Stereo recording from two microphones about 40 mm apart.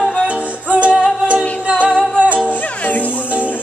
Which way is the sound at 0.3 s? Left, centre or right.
Right.